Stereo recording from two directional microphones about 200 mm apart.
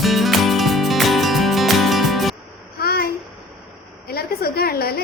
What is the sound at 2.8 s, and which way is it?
Babbling, 50° left (ahead or behind).